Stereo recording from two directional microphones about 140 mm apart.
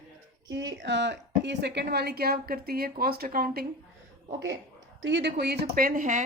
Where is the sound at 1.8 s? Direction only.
90° right.